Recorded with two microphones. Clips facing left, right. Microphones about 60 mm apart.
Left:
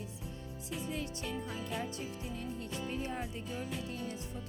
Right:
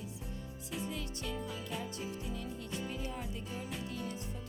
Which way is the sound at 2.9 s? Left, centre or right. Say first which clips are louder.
Left 3 dB; left.